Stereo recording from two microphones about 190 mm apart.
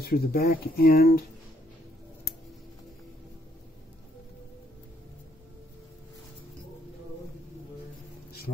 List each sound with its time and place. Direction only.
0.0 s speech: 55° left (ahead or behind)